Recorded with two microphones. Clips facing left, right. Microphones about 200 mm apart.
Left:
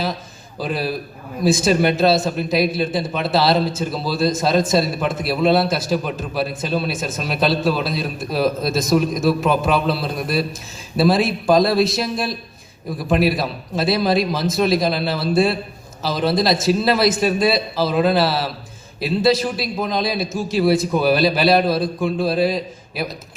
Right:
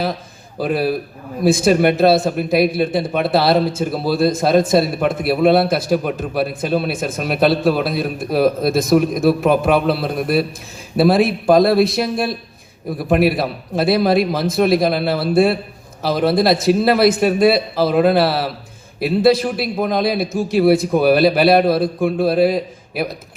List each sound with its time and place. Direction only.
0.6 s a man's voice: 55° right (ahead or behind)